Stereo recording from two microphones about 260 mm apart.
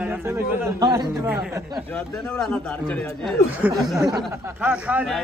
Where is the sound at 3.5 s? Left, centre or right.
Centre.